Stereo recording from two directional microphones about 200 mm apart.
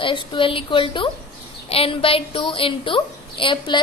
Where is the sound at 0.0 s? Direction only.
25° left (ahead or behind).